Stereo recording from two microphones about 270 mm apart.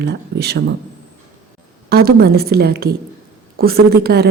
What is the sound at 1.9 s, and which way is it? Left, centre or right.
A woman's voice, right.